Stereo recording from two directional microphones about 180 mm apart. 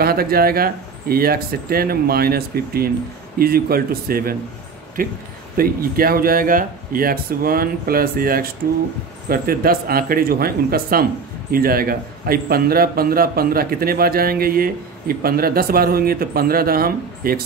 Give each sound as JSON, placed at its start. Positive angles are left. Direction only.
{"t": 0.0, "sound": "a man's voice", "side_deg": -55}